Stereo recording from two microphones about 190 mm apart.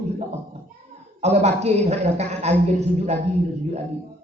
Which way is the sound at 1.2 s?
35° right (ahead or behind).